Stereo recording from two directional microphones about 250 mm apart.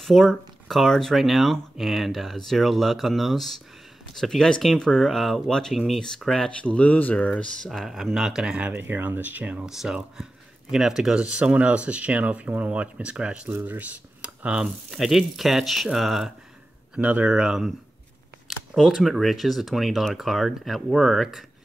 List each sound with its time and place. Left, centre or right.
0.0 s speech: centre
18.8 s speech: centre